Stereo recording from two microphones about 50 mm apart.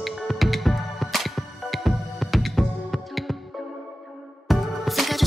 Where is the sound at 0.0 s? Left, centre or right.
Centre.